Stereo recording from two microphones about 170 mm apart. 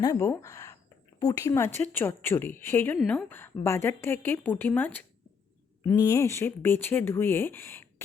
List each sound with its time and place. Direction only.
0.0 s speech: 15° left (ahead or behind)